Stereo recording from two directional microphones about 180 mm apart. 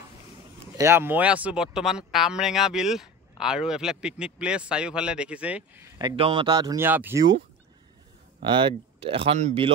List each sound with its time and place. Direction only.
0.7 s speech: 15° right (ahead or behind)
5.9 s speech: 25° right (ahead or behind); by 7.2 s 10° right (ahead or behind)
8.4 s speech: 25° right (ahead or behind)